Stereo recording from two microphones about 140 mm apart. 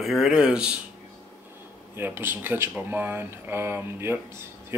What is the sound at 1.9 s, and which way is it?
Speech, 15° right (ahead or behind).